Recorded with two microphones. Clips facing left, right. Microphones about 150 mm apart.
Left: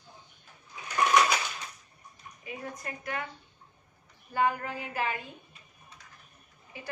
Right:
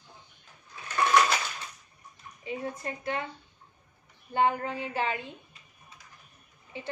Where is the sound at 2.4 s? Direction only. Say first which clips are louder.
Right 6 dB; 25° right (ahead or behind).